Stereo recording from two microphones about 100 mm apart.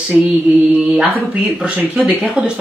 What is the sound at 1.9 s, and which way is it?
Speech, 15° right (ahead or behind).